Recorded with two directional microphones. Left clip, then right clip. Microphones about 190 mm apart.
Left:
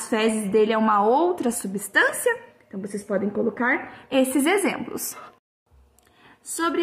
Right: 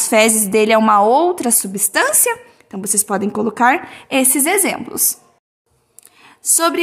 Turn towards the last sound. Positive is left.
turn(degrees=-45)  # may be behind; listen again after turning